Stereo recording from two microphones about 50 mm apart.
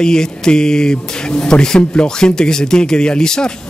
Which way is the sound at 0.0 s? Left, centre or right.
Centre.